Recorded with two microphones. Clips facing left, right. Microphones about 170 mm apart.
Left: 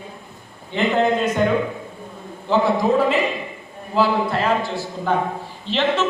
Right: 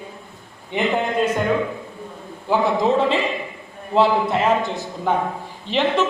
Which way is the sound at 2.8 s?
25° right (ahead or behind).